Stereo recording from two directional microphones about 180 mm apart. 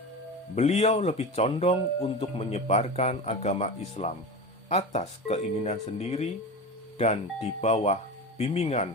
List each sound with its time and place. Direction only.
0.5 s speech: 40° left (ahead or behind)